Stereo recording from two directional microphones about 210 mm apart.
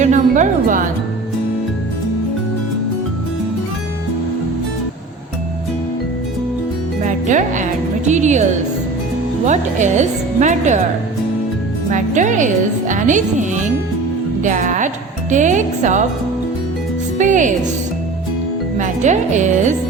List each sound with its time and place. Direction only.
0.0 s music: 35° right (ahead or behind)
7.0 s music: 35° right (ahead or behind)
9.5 s a woman's voice: 35° right (ahead or behind)
11.9 s a woman's voice: 35° right (ahead or behind)
17.2 s a woman's voice: 35° right (ahead or behind)
18.8 s a woman's voice: 35° right (ahead or behind)